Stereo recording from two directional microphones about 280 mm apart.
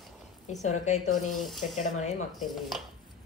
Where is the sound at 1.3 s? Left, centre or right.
Centre.